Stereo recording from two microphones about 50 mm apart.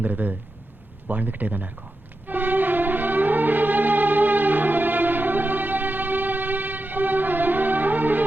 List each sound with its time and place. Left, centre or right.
0.0 s speech: right
2.2 s music: right